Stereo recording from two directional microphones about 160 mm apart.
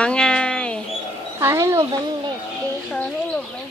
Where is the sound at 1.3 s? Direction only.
15° right (ahead or behind).